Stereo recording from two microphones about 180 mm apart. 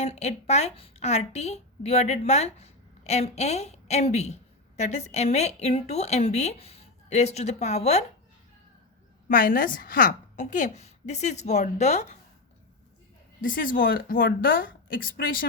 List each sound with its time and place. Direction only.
0.0 s a woman's voice: 35° left (ahead or behind)
9.3 s a woman's voice: 50° left (ahead or behind)
13.4 s a woman's voice: 50° left (ahead or behind)